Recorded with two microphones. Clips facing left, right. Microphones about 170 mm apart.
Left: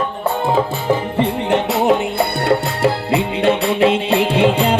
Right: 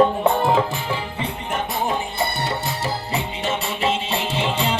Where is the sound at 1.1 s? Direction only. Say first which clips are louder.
Left 10 dB; 70° left (ahead or behind).